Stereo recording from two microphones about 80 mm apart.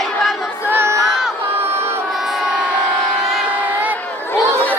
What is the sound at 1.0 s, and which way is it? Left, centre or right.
Crowd, centre.